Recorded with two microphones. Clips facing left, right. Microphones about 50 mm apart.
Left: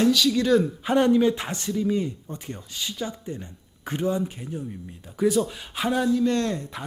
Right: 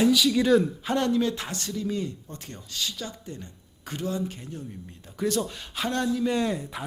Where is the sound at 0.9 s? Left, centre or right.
Centre.